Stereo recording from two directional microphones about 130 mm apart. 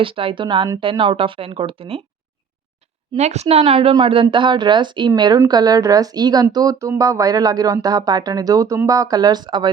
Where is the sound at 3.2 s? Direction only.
60° right (ahead or behind).